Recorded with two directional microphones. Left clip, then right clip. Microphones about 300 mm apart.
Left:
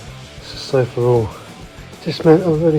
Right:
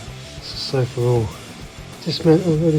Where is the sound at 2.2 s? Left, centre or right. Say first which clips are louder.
Left 4 dB; left.